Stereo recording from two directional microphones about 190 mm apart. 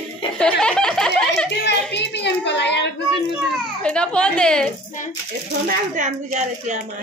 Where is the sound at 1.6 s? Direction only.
65° left (ahead or behind).